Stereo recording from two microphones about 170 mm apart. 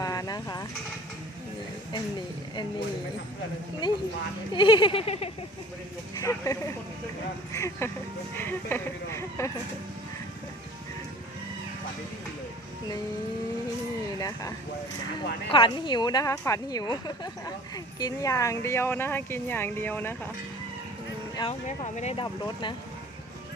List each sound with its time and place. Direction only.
0.0 s vehicle: 20° left (ahead or behind)
3.8 s speech: 25° left (ahead or behind)
4.5 s a sound: 30° left (ahead or behind)
6.2 s speech: 15° left (ahead or behind)
14.2 s speech: 20° left (ahead or behind)
15.5 s speech: 30° left (ahead or behind); by 20.1 s 10° left (ahead or behind)
21.3 s speech: 30° left (ahead or behind)
21.9 s a sound: 40° left (ahead or behind)
22.2 s speech: 25° left (ahead or behind)